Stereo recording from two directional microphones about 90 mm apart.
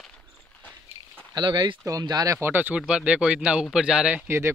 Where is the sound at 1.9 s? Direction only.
45° right (ahead or behind).